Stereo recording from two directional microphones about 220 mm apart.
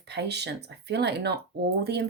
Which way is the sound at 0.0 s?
50° right (ahead or behind).